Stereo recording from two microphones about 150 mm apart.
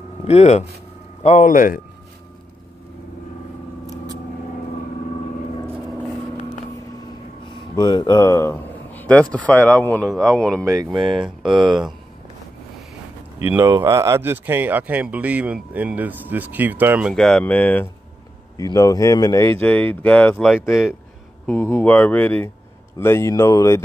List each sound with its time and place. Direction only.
0.3 s speech: 50° left (ahead or behind)
7.5 s speech: 30° left (ahead or behind); by 10.6 s 5° left (ahead or behind)
10.6 s speech: 20° right (ahead or behind)
13.4 s speech: 15° right (ahead or behind)
17.1 s speech: 5° left (ahead or behind)
18.6 s speech: 25° left (ahead or behind)
19.6 s speech: 10° left (ahead or behind)
21.5 s speech: 15° left (ahead or behind)